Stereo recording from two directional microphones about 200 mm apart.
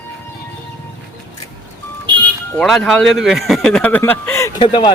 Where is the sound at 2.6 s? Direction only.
Centre (ahead or behind).